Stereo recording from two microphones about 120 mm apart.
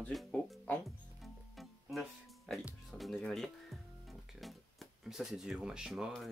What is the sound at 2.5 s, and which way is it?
Speech, 5° left (ahead or behind).